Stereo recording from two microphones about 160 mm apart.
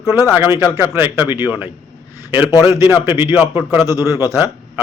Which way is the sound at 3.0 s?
15° right (ahead or behind).